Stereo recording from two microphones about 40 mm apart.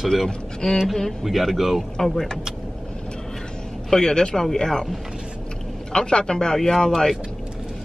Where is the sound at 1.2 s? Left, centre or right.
Centre.